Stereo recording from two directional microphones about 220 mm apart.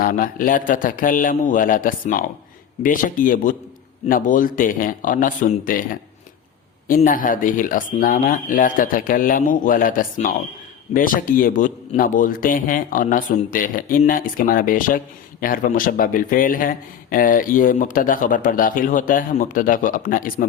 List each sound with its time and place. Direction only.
0.0 s a man's voice: 40° left (ahead or behind)
6.8 s a man's voice: 40° left (ahead or behind)